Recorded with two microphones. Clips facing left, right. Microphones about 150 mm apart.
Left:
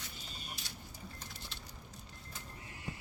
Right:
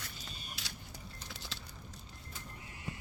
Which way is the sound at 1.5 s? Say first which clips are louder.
Right 3 dB; 90° right.